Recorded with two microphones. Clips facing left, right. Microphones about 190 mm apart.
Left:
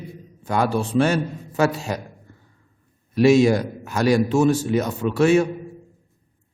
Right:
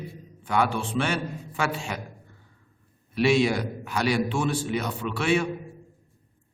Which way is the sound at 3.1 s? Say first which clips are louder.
Left 7 dB; 45° left (ahead or behind).